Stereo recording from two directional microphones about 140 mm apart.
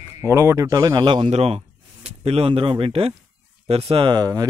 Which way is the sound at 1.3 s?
45° right (ahead or behind).